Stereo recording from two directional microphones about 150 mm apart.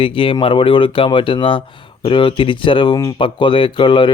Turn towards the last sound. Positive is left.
turn(degrees=35)  # may be behind; listen again after turning